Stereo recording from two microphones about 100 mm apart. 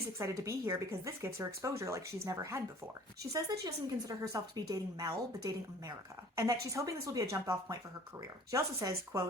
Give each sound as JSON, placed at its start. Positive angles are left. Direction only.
{"t": 0.2, "sound": "speech", "side_deg": -30}